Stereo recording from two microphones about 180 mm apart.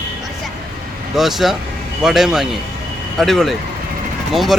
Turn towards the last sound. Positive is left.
turn(degrees=0)  # may be behind; listen again after turning